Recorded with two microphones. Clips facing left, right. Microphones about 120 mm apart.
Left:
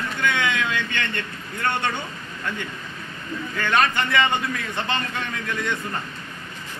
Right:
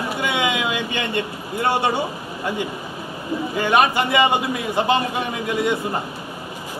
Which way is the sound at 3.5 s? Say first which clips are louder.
Right 4 dB; 15° right (ahead or behind).